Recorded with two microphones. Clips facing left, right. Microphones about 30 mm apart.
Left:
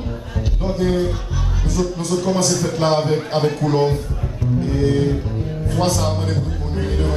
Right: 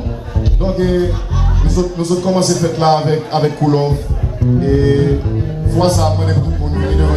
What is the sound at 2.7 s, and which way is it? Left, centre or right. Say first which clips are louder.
Speech: right 4 dB; right.